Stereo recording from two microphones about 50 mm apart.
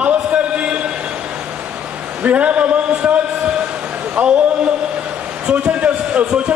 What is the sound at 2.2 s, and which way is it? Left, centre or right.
A man's voice, right.